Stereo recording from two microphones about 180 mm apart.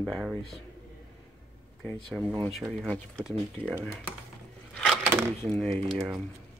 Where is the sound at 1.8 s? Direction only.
5° left (ahead or behind).